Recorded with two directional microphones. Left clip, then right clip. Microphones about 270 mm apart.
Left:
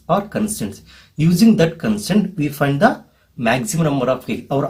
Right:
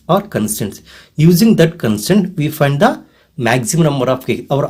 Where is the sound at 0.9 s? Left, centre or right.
Right.